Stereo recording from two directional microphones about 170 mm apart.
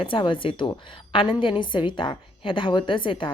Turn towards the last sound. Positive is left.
turn(degrees=30)  # may be behind; listen again after turning